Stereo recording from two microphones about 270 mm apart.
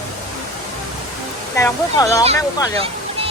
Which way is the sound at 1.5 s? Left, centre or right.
Centre.